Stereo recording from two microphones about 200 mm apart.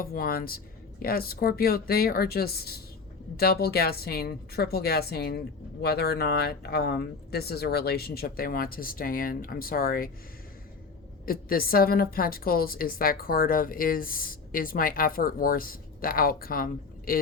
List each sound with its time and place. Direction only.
0.0 s a woman's voice: 50° left (ahead or behind)
11.3 s a woman's voice: 45° left (ahead or behind)